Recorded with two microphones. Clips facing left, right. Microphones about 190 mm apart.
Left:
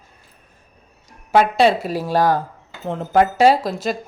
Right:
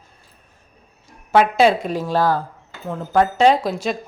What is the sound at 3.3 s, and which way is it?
Speech, 5° left (ahead or behind).